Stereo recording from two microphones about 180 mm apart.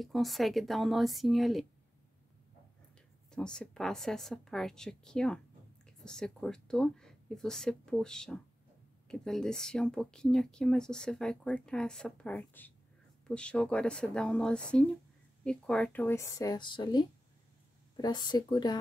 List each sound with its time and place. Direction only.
0.0 s speech: centre (ahead or behind)
3.3 s speech: 5° left (ahead or behind); by 18.8 s 25° left (ahead or behind)